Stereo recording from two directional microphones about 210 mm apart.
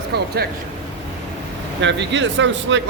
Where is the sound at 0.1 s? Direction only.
50° right (ahead or behind).